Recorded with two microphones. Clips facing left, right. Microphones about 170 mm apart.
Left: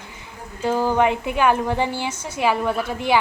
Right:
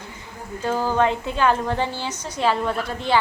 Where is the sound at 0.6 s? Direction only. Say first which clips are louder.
Left 2 dB; 15° left (ahead or behind).